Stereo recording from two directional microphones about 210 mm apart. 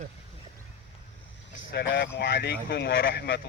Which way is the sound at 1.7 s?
50° left (ahead or behind).